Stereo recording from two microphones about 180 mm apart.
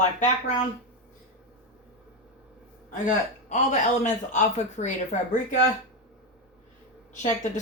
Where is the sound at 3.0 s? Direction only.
40° left (ahead or behind).